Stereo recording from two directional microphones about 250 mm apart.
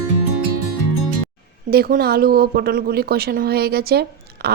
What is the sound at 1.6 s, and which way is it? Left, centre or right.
A woman's voice, right.